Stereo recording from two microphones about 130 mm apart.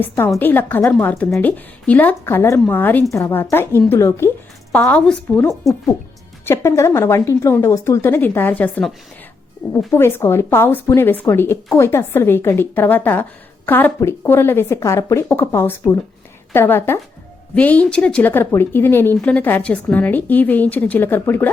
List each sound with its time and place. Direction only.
0.3 s speech: 15° left (ahead or behind)
6.4 s speech: 20° left (ahead or behind)
9.9 s speech: 20° left (ahead or behind)